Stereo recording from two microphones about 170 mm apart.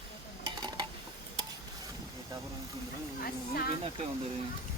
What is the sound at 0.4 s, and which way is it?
Dishes, 25° right (ahead or behind).